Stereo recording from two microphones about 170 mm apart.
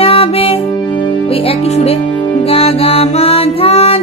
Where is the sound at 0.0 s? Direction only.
35° left (ahead or behind).